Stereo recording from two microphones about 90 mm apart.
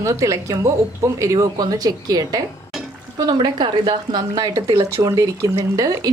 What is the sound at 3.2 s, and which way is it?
A woman's voice, 55° right (ahead or behind).